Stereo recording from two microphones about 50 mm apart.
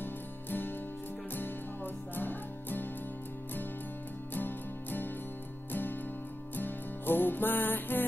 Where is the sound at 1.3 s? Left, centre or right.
Left.